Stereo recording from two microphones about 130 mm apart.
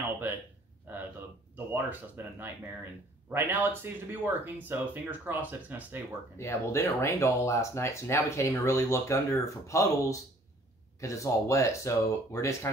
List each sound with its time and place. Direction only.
0.9 s a sound: 15° right (ahead or behind)
1.7 s speech: 15° right (ahead or behind)
6.3 s speech: 20° left (ahead or behind)